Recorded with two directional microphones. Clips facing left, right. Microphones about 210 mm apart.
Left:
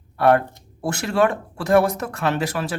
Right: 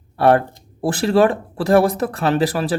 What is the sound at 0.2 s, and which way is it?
Speech, 30° right (ahead or behind).